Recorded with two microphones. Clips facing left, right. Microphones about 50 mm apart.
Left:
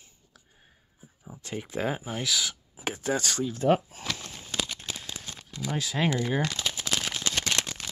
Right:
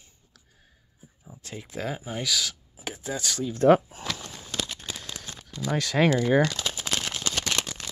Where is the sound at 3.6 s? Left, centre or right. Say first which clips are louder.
Right 6 dB; right.